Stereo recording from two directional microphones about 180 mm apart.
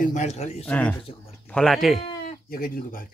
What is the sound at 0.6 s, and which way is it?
Speech, 10° left (ahead or behind).